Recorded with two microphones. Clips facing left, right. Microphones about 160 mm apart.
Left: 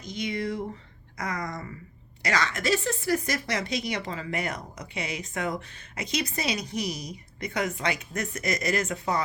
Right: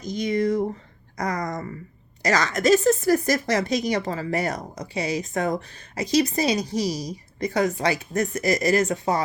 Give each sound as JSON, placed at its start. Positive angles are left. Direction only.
{"t": 0.0, "sound": "speech", "side_deg": -40}